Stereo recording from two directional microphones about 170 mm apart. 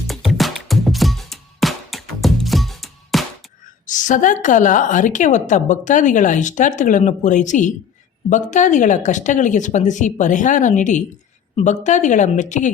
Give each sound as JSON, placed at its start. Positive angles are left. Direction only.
{"t": 0.1, "sound": "music", "side_deg": 0}
{"t": 3.8, "sound": "a woman's voice", "side_deg": 50}